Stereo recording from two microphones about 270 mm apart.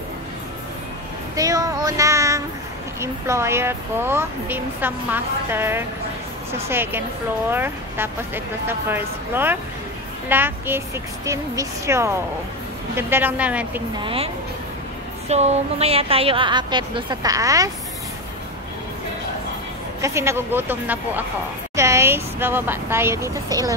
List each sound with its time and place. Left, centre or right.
1.3 s child singing: centre
3.0 s speech: centre
13.9 s a woman's voice: centre
20.0 s speech: centre